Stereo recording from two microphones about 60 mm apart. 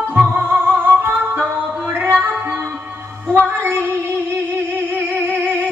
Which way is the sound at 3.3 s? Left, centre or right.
Right.